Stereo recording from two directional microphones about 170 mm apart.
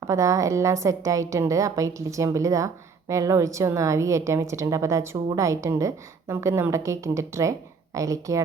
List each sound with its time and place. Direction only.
0.1 s a woman's voice: 20° right (ahead or behind)